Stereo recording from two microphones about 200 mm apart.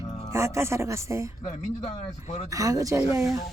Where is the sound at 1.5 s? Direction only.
35° left (ahead or behind).